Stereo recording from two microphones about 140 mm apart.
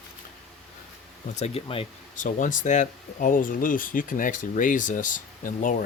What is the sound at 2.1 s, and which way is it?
Speech, 65° left (ahead or behind).